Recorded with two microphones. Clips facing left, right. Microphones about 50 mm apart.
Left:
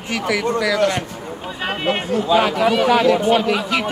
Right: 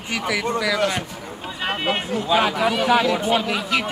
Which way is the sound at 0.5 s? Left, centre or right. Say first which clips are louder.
Left 4 dB; left.